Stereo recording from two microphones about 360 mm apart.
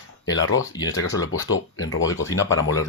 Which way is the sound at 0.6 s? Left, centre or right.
Centre.